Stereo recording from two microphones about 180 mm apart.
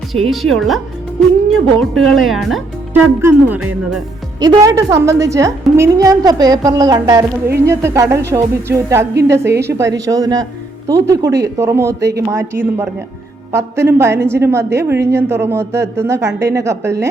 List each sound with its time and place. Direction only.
0.3 s speech: centre (ahead or behind)
1.8 s speech: centre (ahead or behind)
3.2 s speech: 10° right (ahead or behind)
4.4 s a woman's voice: 20° right (ahead or behind)